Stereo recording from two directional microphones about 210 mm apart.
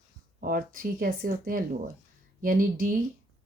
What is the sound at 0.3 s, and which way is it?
Speech, 45° right (ahead or behind).